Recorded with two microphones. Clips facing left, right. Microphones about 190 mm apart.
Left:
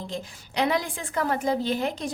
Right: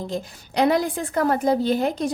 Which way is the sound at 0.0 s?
45° right (ahead or behind).